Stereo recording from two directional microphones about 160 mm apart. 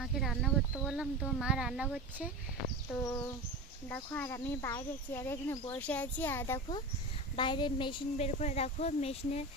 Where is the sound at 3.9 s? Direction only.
15° left (ahead or behind).